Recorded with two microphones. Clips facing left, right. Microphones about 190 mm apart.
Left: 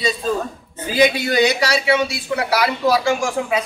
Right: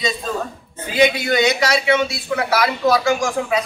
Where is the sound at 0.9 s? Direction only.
35° left (ahead or behind).